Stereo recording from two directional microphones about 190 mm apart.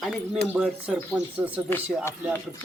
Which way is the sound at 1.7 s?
15° left (ahead or behind).